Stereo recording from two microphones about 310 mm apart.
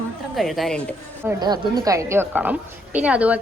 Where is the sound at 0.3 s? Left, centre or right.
Centre.